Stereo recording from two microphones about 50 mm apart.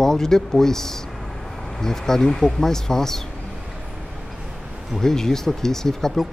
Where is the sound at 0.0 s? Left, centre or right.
Centre.